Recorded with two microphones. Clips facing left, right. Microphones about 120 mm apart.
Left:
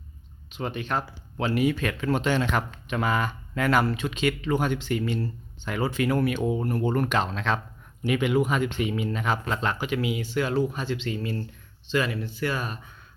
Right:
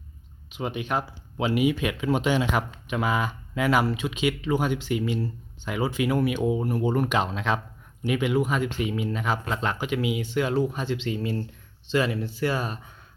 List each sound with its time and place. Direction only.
0.5 s speech: 10° right (ahead or behind)
8.0 s speech: centre (ahead or behind); by 12.8 s 25° right (ahead or behind)